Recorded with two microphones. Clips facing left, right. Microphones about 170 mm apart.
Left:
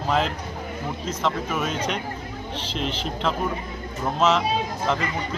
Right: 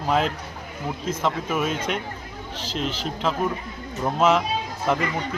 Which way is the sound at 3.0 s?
5° right (ahead or behind).